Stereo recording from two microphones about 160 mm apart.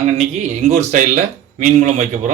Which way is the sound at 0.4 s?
45° right (ahead or behind).